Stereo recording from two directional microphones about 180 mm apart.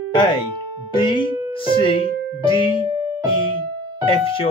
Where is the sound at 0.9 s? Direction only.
30° left (ahead or behind).